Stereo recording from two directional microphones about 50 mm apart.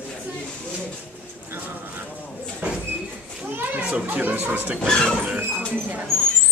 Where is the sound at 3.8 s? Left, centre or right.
Right.